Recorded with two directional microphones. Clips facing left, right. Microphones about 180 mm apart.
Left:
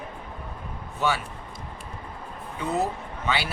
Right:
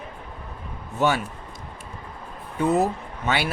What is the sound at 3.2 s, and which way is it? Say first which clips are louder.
Speech: right 3 dB; 50° right (ahead or behind).